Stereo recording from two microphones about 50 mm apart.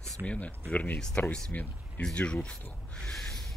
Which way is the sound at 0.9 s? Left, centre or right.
Centre.